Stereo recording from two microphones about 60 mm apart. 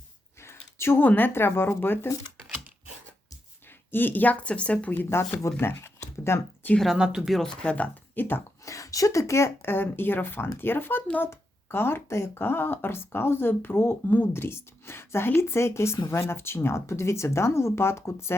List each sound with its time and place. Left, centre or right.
0.4 s a sound: left
1.0 s speech: left
3.9 s speech: left
4.9 s speech: left
5.5 s a sound: left
6.9 s speech: centre
7.4 s speech: centre
8.1 s speech: left
8.6 s speech: left